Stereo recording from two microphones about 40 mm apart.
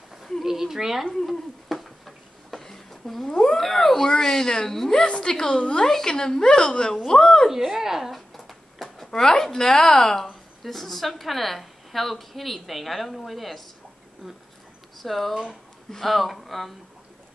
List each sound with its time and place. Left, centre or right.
0.4 s speech: centre
1.1 s a sound: centre
3.3 s a woman's voice: centre
5.0 s a woman's voice: left
7.4 s a woman's voice: centre
8.1 s a sound: centre
9.2 s a woman's voice: centre
15.0 s a woman's voice: centre